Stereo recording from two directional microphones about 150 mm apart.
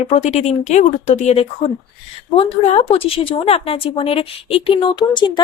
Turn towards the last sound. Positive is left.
turn(degrees=30)  # may be behind; listen again after turning